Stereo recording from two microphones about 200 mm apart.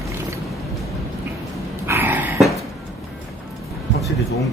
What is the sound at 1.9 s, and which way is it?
Cough, 10° right (ahead or behind).